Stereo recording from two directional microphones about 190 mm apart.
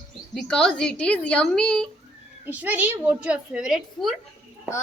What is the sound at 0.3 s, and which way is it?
A woman's voice, 5° left (ahead or behind).